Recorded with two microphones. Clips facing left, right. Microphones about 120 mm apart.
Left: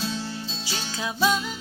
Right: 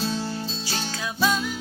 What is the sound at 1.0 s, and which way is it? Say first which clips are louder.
Music: left 1 dB; 20° left (ahead or behind).